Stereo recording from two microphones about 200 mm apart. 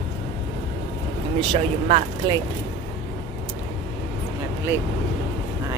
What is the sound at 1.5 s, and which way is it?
Speech, 35° right (ahead or behind).